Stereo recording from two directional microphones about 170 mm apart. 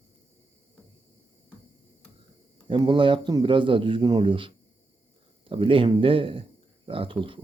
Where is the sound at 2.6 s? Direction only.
30° right (ahead or behind).